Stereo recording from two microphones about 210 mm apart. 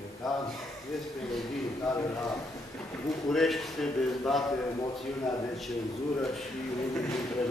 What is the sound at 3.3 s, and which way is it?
A man's voice, centre (ahead or behind).